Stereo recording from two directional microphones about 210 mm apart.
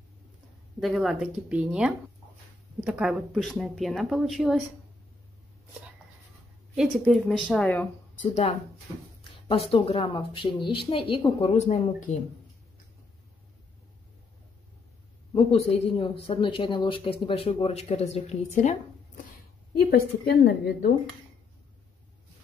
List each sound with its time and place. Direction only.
0.7 s speech: centre (ahead or behind)
6.7 s speech: centre (ahead or behind)
9.5 s speech: 25° left (ahead or behind)
15.3 s speech: 30° left (ahead or behind)
20.2 s a woman's voice: 50° left (ahead or behind)